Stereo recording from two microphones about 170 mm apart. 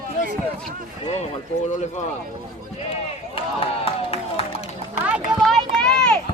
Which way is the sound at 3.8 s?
35° left (ahead or behind).